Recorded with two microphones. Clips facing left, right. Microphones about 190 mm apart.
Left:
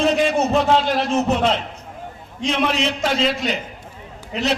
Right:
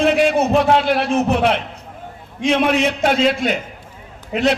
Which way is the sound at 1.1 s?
10° right (ahead or behind).